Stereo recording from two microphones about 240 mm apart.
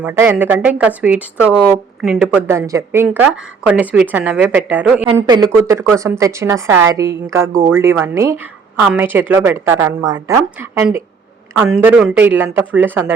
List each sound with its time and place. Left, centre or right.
0.0 s a woman's voice: centre